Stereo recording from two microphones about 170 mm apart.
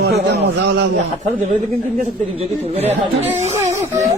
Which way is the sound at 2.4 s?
40° right (ahead or behind).